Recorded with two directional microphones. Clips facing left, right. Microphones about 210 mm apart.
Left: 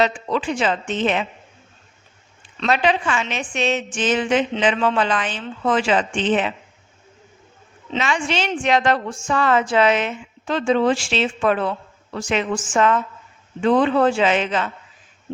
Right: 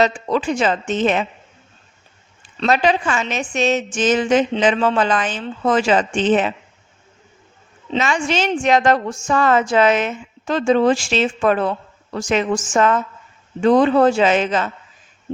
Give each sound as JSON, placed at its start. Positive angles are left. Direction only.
{"t": 0.0, "sound": "a woman's voice", "side_deg": -45}
{"t": 2.6, "sound": "a woman's voice", "side_deg": -40}
{"t": 7.9, "sound": "a woman's voice", "side_deg": -45}